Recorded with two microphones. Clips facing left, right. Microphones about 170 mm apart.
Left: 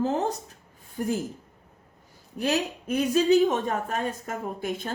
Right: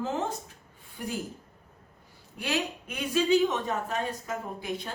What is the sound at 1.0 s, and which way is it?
Speech, 45° left (ahead or behind).